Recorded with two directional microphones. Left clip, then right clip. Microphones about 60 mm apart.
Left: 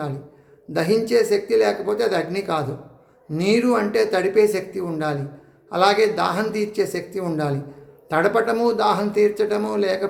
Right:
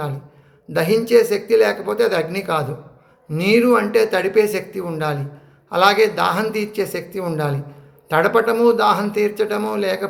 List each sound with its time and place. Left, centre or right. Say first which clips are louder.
0.7 s a man's voice: right 4 dB; left